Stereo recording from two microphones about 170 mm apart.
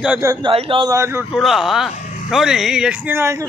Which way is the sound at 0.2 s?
20° right (ahead or behind).